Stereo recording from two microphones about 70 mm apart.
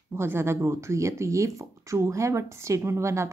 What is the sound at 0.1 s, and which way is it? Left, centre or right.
Speech, right.